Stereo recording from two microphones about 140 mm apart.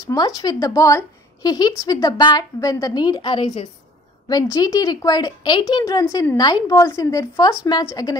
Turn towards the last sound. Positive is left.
turn(degrees=25)  # may be behind; listen again after turning